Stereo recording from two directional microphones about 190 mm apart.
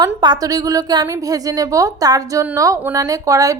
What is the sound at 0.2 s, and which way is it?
A woman's voice, 20° right (ahead or behind).